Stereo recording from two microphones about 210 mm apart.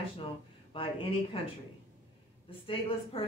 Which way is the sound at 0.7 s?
25° left (ahead or behind).